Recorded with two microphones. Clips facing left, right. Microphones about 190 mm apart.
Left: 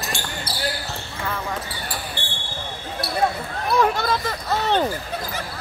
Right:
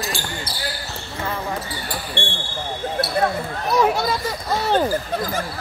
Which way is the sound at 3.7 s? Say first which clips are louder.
Right 1 dB; 10° right (ahead or behind).